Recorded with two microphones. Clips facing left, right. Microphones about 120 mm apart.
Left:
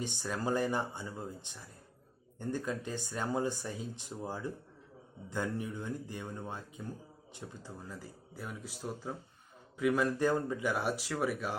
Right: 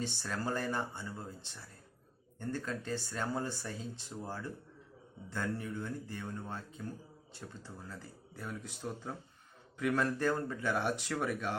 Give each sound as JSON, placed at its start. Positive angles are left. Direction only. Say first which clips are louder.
{"t": 0.0, "sound": "speech", "louder": "left 2 dB", "side_deg": 15}